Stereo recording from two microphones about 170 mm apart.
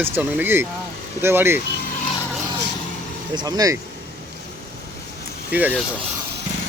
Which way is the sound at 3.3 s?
25° right (ahead or behind).